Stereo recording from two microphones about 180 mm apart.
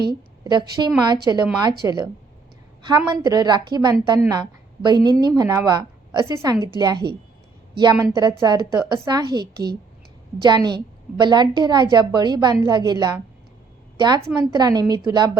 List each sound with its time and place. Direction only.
0.4 s a woman's voice: 25° right (ahead or behind)
3.2 s a woman's voice: 25° right (ahead or behind)
14.3 s a woman's voice: 25° right (ahead or behind)